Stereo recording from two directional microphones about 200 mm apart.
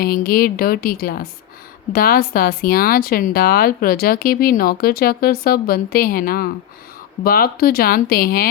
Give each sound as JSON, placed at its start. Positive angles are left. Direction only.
{"t": 0.0, "sound": "a woman's voice", "side_deg": 45}